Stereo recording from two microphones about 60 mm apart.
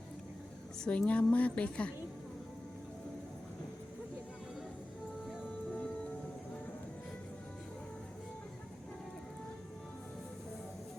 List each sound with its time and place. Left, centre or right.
0.9 s speech: left